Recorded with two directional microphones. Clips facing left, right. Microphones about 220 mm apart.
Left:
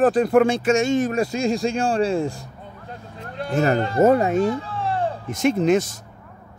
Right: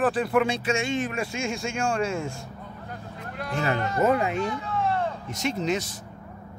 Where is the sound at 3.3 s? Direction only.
30° left (ahead or behind).